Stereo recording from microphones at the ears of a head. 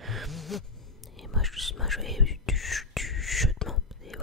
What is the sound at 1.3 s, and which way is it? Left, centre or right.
Whispering, centre.